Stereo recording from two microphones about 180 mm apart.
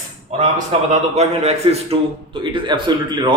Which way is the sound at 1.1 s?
35° right (ahead or behind).